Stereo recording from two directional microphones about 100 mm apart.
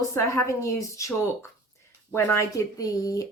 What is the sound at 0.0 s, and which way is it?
A woman's voice, 30° left (ahead or behind).